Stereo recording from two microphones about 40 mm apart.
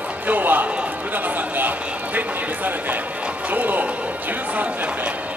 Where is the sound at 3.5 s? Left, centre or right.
Right.